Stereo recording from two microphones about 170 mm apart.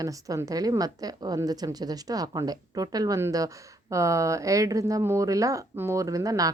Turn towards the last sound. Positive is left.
turn(degrees=-20)  # may be behind; listen again after turning